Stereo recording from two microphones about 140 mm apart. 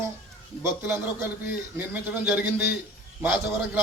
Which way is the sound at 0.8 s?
15° right (ahead or behind).